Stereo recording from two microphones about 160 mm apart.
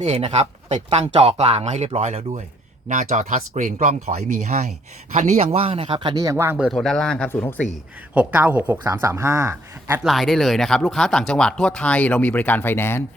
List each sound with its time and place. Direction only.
0.0 s speech: 40° right (ahead or behind); by 6.7 s 15° right (ahead or behind)
6.7 s speech: centre (ahead or behind)
8.1 s speech: 10° right (ahead or behind)
10.0 s speech: centre (ahead or behind)